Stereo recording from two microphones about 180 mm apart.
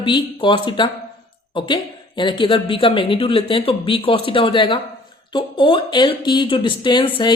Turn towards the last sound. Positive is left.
turn(degrees=25)  # may be behind; listen again after turning